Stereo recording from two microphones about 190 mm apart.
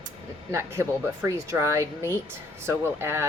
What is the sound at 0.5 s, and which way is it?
Speech, 15° right (ahead or behind).